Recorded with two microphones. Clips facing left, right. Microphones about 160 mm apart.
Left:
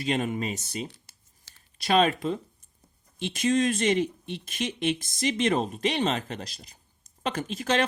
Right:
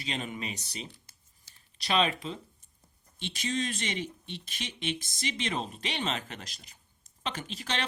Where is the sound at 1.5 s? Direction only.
90° left.